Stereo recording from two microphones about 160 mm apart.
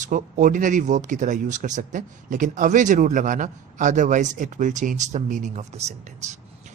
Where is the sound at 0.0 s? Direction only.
50° right (ahead or behind).